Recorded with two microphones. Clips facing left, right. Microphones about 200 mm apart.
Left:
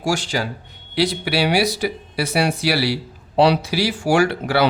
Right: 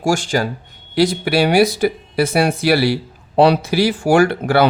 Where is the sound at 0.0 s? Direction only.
50° right (ahead or behind).